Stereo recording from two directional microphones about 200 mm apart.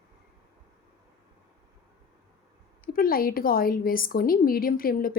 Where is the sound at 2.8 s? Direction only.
45° left (ahead or behind).